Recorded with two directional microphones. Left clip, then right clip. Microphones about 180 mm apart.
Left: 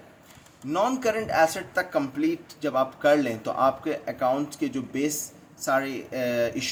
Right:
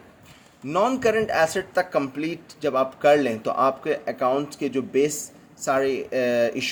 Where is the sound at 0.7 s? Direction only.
40° right (ahead or behind).